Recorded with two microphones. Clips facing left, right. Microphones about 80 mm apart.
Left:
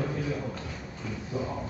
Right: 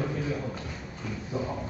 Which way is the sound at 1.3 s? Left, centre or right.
Right.